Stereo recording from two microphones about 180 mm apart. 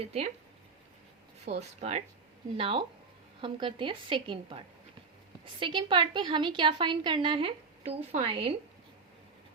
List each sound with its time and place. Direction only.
1.5 s a woman's voice: 35° right (ahead or behind)